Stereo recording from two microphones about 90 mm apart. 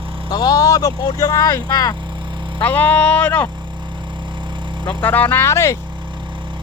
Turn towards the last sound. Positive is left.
turn(degrees=30)  # may be behind; listen again after turning